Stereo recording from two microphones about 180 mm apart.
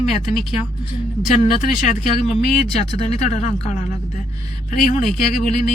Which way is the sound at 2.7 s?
35° left (ahead or behind).